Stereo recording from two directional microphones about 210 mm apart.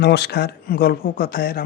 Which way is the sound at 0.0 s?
55° left (ahead or behind).